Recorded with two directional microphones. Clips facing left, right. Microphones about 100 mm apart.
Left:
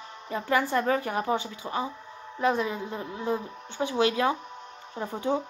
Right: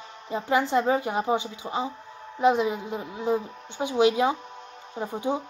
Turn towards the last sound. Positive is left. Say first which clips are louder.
# even
turn(degrees=-15)  # may be behind; listen again after turning